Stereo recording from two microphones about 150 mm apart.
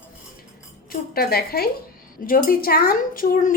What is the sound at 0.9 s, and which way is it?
Speech, 90° left.